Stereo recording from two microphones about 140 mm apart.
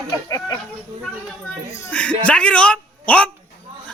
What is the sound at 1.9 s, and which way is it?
A man's voice, 10° left (ahead or behind).